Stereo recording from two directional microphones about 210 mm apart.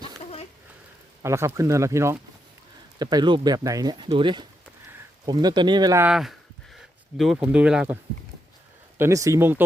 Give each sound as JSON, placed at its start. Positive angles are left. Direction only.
{"t": 1.2, "sound": "speech", "side_deg": -15}
{"t": 6.1, "sound": "speech", "side_deg": 0}
{"t": 9.0, "sound": "speech", "side_deg": -15}